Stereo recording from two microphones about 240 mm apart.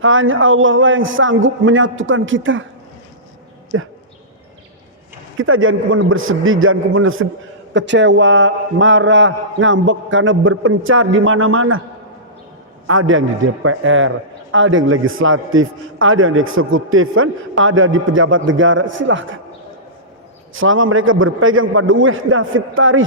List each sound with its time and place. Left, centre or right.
0.0 s a man's voice: right
3.7 s a man's voice: right
5.4 s a man's voice: right
12.9 s a man's voice: right
20.5 s a man's voice: right